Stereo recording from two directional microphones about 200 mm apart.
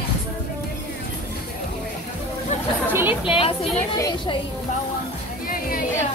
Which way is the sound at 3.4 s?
25° left (ahead or behind).